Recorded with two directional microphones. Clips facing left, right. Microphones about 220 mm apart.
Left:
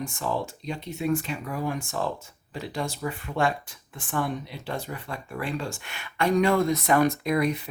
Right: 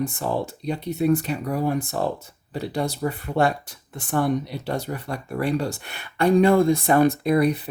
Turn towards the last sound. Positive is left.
turn(degrees=-35)  # may be behind; listen again after turning